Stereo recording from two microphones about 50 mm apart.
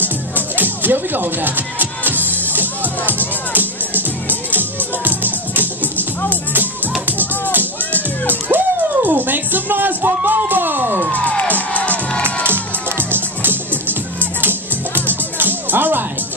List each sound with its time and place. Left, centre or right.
0.6 s music: right
7.5 s music: right
11.1 s music: left
12.4 s music: right
15.3 s music: right